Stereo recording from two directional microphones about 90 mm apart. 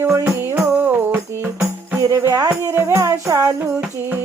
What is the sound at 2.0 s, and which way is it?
Music, 35° right (ahead or behind).